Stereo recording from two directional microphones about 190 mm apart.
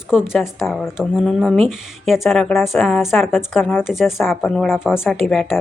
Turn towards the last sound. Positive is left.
turn(degrees=0)  # may be behind; listen again after turning